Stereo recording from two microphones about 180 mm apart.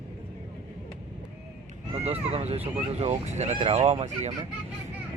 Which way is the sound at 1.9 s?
35° right (ahead or behind).